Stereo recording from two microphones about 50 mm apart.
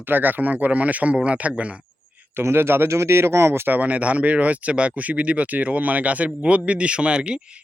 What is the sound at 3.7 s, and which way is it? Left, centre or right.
Speech, right.